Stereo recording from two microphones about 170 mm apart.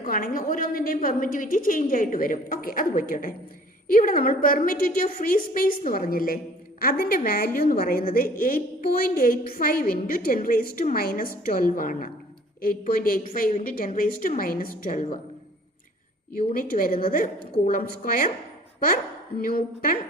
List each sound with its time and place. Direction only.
0.0 s a woman's voice: 60° left (ahead or behind)
16.6 s a woman's voice: 55° left (ahead or behind)
19.4 s a woman's voice: 55° left (ahead or behind)